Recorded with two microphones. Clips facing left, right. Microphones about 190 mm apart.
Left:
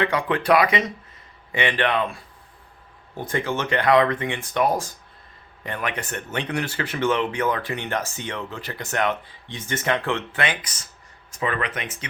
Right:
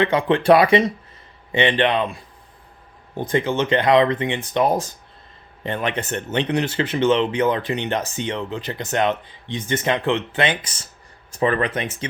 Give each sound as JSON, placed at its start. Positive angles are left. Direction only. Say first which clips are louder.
{"t": 0.0, "sound": "speech", "louder": "right 5 dB", "side_deg": -25}